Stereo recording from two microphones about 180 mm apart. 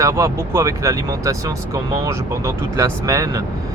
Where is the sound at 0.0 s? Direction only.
15° right (ahead or behind).